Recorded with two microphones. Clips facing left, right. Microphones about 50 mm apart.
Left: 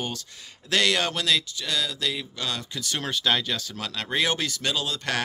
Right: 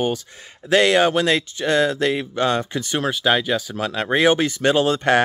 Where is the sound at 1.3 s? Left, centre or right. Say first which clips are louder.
Right 7 dB; right.